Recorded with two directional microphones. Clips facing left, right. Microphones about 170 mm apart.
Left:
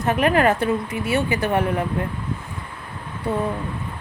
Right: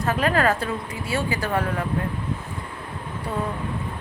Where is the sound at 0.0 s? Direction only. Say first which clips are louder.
Left 3 dB; 20° left (ahead or behind).